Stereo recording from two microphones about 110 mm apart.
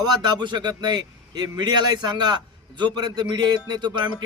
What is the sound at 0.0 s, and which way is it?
A man's voice, 40° right (ahead or behind).